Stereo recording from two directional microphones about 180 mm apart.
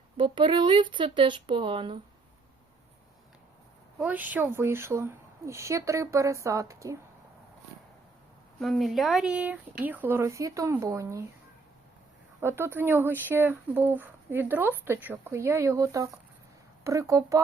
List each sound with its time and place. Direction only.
0.2 s speech: 25° right (ahead or behind)
3.9 s speech: 10° right (ahead or behind)
8.5 s speech: centre (ahead or behind); by 11.3 s 15° right (ahead or behind)
12.4 s speech: 15° right (ahead or behind)